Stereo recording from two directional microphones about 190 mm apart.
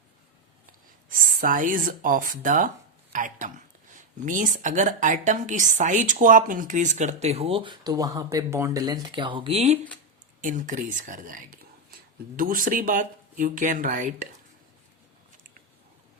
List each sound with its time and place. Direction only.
1.1 s a woman's voice: 45° right (ahead or behind)
10.4 s speech: 45° right (ahead or behind)